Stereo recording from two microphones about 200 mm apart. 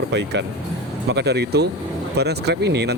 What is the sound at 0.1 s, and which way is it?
Speech, 60° right (ahead or behind).